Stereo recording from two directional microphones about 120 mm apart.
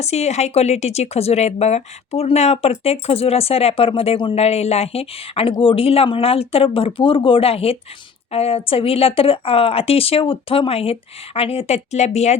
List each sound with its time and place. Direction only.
0.0 s speech: 65° left (ahead or behind)